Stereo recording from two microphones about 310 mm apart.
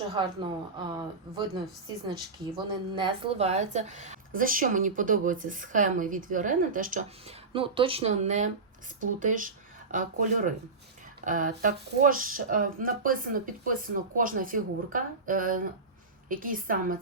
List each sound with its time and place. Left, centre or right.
0.1 s a woman's voice: centre